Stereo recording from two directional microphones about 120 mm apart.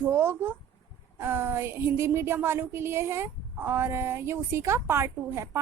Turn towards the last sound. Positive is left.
turn(degrees=-20)  # may be behind; listen again after turning